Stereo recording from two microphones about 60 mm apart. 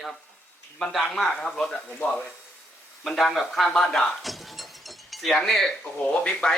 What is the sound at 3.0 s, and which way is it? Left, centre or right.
Speech, centre.